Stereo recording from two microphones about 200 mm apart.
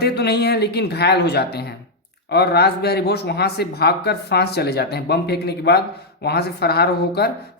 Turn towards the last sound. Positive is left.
turn(degrees=55)  # may be behind; listen again after turning